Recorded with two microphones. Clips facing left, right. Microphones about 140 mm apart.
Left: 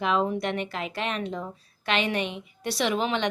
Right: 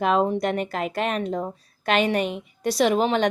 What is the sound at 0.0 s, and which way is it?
A woman's voice, 45° right (ahead or behind).